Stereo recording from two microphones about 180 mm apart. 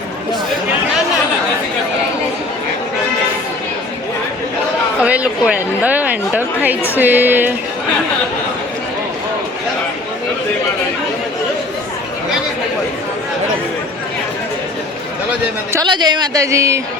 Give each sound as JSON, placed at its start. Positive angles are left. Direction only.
{"t": 5.0, "sound": "a woman's voice", "side_deg": -5}
{"t": 15.7, "sound": "a man's voice", "side_deg": -25}